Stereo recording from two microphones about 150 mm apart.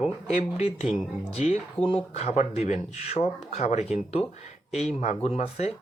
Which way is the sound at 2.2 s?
50° left (ahead or behind).